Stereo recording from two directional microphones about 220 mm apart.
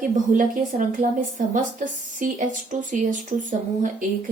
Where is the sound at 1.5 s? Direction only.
35° right (ahead or behind).